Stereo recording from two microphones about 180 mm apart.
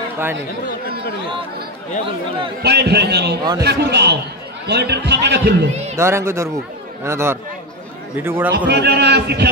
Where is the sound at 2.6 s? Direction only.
65° right (ahead or behind).